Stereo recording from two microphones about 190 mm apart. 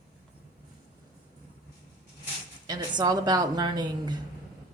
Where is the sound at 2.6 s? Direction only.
20° right (ahead or behind).